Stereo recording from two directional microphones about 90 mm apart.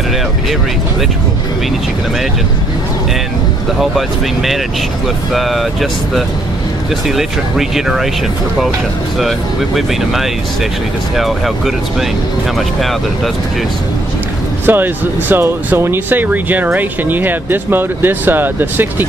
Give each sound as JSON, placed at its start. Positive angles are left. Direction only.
{"t": 3.8, "sound": "speech", "side_deg": 0}
{"t": 11.1, "sound": "speech", "side_deg": 0}
{"t": 14.7, "sound": "speech", "side_deg": -20}